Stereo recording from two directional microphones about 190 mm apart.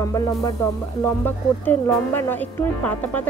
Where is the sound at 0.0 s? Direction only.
15° left (ahead or behind).